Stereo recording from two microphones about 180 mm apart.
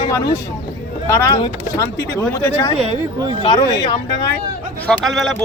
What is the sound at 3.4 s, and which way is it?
Speech, 25° left (ahead or behind).